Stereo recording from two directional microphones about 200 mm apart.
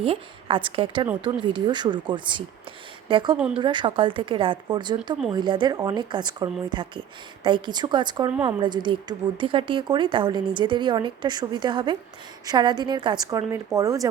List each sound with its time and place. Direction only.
0.0 s a woman's voice: 25° right (ahead or behind)
3.3 s speech: 5° right (ahead or behind)
3.6 s a woman's voice: 25° right (ahead or behind)